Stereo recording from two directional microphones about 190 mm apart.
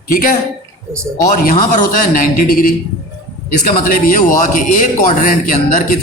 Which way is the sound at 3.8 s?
45° left (ahead or behind).